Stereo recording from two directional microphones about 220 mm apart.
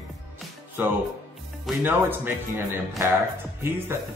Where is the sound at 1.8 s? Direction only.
10° right (ahead or behind).